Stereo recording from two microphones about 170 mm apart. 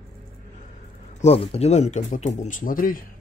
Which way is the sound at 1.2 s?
35° left (ahead or behind).